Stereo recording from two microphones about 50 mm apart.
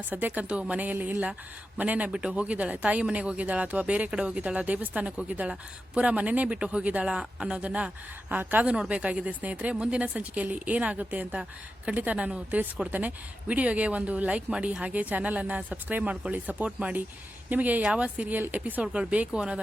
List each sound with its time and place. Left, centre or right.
0.1 s a woman's voice: right
2.0 s speech: centre
2.3 s speech: right
8.3 s a woman's voice: right
8.6 s speech: centre
8.9 s a woman's voice: right
17.8 s speech: right